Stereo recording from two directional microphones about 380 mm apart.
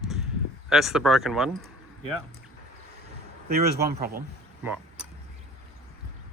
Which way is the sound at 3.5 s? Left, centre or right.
Right.